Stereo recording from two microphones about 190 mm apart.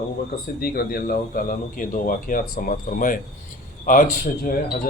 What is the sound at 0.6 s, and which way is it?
A man's voice, 55° left (ahead or behind).